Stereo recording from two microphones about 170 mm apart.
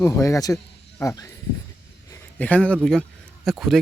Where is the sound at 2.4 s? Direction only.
10° left (ahead or behind).